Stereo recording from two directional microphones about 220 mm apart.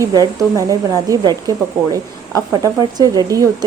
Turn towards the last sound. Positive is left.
turn(degrees=-15)  # may be behind; listen again after turning